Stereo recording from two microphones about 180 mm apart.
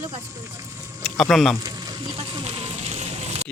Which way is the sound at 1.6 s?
20° right (ahead or behind).